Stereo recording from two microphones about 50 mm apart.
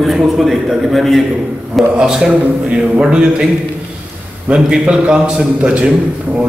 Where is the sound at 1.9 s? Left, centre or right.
Centre.